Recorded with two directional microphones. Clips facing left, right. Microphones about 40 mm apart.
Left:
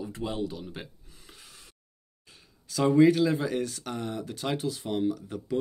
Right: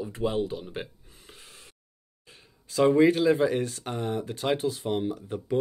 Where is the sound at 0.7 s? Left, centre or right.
Right.